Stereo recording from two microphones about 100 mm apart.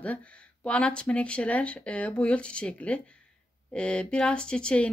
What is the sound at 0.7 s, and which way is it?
Speech, 10° left (ahead or behind).